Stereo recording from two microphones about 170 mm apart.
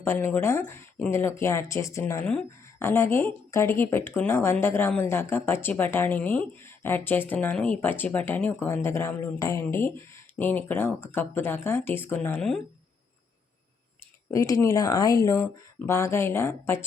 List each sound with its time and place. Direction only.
0.0 s speech: 15° left (ahead or behind)
14.3 s speech: 20° left (ahead or behind)